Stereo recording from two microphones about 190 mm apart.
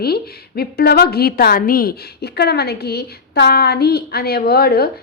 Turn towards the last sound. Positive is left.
turn(degrees=55)  # may be behind; listen again after turning